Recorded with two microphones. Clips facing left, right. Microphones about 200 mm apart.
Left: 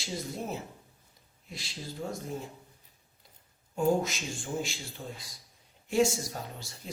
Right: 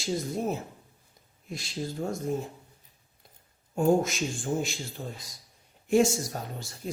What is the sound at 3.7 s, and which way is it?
Speech, 50° right (ahead or behind).